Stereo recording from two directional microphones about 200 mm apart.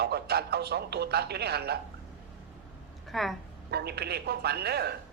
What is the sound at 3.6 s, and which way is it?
A man's voice, 55° right (ahead or behind).